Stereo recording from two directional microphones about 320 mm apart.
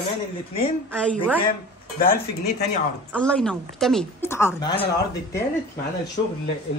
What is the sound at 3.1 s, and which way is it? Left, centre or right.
Speech, centre.